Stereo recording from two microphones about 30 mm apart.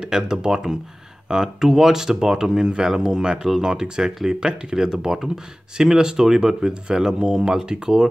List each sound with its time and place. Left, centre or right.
0.0 s speech: right
4.8 s speech: centre